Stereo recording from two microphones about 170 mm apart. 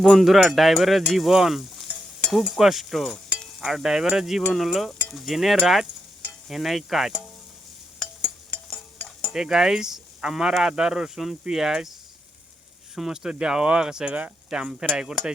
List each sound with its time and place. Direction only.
0.0 s speech: centre (ahead or behind)
8.4 s stir: 5° left (ahead or behind)
9.3 s speech: 5° right (ahead or behind)
13.0 s speech: 5° right (ahead or behind)